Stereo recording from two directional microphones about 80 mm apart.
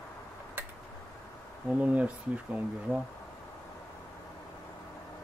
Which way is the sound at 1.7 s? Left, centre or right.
Centre.